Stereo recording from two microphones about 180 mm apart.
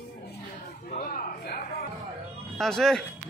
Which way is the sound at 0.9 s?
50° left (ahead or behind).